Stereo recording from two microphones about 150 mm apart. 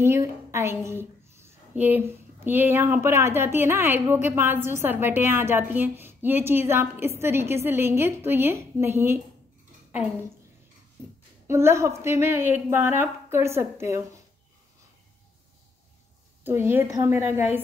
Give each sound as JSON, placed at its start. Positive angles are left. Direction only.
{"t": 0.0, "sound": "a woman's voice", "side_deg": -15}
{"t": 11.4, "sound": "a woman's voice", "side_deg": -15}
{"t": 16.4, "sound": "a woman's voice", "side_deg": -15}